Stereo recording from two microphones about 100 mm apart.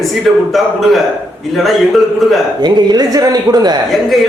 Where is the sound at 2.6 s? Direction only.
45° right (ahead or behind).